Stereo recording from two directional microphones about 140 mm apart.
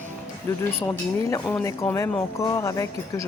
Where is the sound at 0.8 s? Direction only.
20° left (ahead or behind).